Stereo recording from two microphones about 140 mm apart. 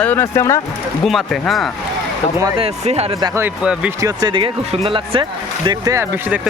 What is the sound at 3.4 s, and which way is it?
Speech, 10° right (ahead or behind).